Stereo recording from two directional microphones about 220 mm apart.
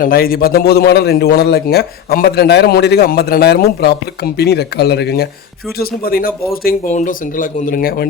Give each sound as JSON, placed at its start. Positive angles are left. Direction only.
{"t": 0.0, "sound": "a man's voice", "side_deg": 40}